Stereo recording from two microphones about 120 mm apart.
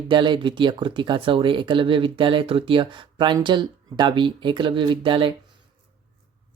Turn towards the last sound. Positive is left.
turn(degrees=-45)  # may be behind; listen again after turning